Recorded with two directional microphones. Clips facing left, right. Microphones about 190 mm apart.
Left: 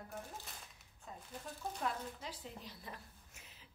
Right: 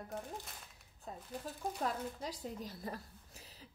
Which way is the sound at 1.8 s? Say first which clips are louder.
Right 2 dB; 40° right (ahead or behind).